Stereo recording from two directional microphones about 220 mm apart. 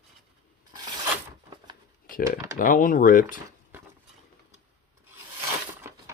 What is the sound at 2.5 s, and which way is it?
Speech, 35° left (ahead or behind).